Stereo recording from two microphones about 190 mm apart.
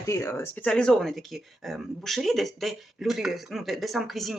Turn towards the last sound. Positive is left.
turn(degrees=0)  # may be behind; listen again after turning